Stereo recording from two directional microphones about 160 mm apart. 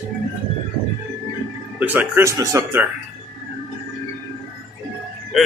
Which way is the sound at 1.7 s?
10° right (ahead or behind).